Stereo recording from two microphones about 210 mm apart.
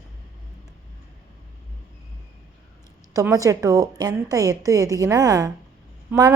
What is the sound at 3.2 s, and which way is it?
A woman's voice, 15° right (ahead or behind).